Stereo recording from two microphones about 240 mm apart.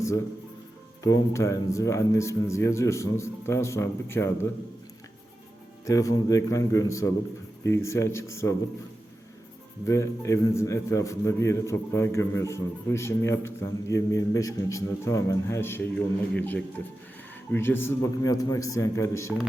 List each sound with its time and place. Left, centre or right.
1.0 s a man's voice: centre
5.8 s a man's voice: centre
9.8 s a man's voice: centre